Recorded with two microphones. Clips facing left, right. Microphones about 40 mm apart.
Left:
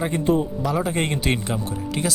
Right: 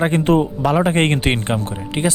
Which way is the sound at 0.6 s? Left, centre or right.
Right.